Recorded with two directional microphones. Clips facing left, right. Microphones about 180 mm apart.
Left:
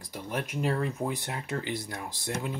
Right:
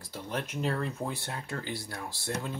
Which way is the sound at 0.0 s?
15° left (ahead or behind).